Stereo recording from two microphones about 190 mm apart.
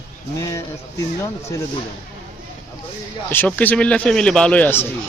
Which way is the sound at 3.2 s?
10° left (ahead or behind).